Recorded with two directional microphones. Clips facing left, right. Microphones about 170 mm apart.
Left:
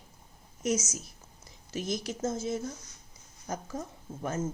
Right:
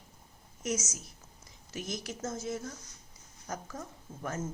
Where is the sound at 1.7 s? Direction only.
30° left (ahead or behind).